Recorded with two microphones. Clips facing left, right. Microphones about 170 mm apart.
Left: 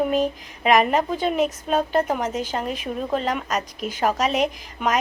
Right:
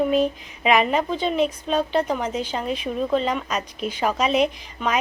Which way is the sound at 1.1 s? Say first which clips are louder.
Even; 45° left (ahead or behind).